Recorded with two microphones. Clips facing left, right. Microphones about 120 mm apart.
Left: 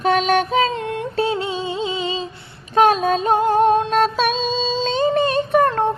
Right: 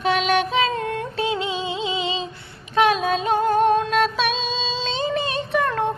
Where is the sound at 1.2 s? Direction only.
40° left (ahead or behind).